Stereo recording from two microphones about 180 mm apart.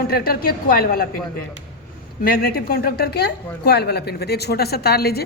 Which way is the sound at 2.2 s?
55° left (ahead or behind).